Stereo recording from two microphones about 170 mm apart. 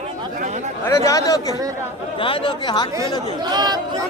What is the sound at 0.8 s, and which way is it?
Speech, 15° left (ahead or behind).